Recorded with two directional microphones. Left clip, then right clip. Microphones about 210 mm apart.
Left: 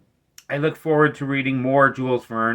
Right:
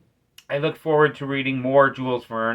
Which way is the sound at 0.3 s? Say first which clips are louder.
Left 1 dB; 15° left (ahead or behind).